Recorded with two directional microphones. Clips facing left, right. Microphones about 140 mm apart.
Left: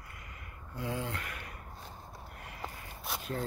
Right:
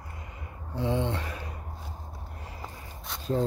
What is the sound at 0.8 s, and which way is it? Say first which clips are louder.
Speech: right 8 dB; 25° right (ahead or behind).